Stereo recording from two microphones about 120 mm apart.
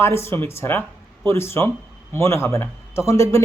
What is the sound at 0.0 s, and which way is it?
A man's voice, 20° left (ahead or behind).